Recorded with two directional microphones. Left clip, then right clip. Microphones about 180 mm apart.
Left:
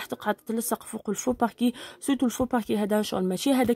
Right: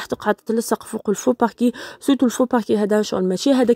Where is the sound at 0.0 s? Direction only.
30° right (ahead or behind).